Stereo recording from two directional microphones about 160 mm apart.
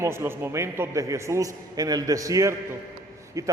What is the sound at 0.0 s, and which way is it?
A man's voice, 15° right (ahead or behind).